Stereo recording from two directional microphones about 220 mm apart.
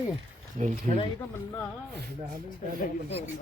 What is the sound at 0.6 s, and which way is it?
Speech, 30° right (ahead or behind).